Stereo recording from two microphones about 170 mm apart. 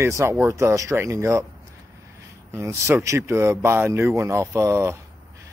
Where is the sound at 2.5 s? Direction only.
15° right (ahead or behind).